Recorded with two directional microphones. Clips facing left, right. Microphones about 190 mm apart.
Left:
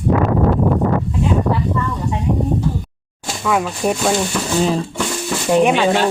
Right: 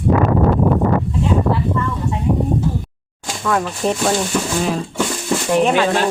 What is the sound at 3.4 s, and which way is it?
Speech, 5° left (ahead or behind).